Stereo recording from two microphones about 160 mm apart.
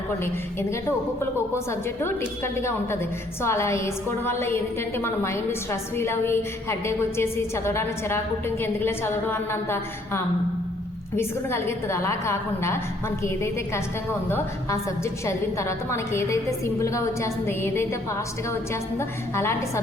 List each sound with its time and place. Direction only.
0.7 s a woman's voice: 15° left (ahead or behind)
11.2 s a woman's voice: 15° left (ahead or behind)